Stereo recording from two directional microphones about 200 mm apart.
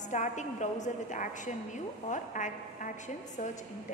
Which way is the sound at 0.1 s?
35° left (ahead or behind).